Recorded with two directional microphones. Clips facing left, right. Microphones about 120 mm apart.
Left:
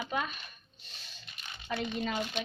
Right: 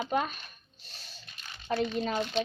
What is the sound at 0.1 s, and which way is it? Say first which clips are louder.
Speech: right 5 dB; 40° right (ahead or behind).